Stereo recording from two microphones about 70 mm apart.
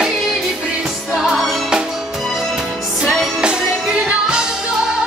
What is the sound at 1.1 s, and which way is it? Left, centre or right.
Music, centre.